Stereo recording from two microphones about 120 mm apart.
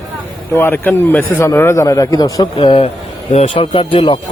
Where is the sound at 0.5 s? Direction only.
20° left (ahead or behind).